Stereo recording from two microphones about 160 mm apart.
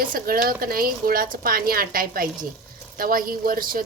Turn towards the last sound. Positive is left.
turn(degrees=-60)  # may be behind; listen again after turning